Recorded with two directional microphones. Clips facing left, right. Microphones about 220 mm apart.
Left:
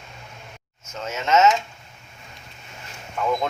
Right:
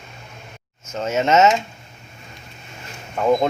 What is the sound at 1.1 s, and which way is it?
Speech, 25° right (ahead or behind).